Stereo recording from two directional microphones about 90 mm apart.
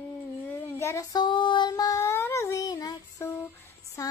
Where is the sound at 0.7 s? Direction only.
30° left (ahead or behind).